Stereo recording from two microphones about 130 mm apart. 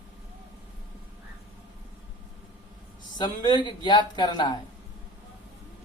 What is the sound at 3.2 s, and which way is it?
Speech, 35° left (ahead or behind).